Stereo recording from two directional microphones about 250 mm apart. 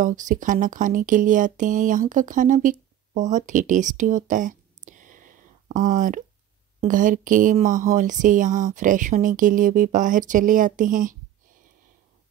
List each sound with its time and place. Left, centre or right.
0.0 s speech: right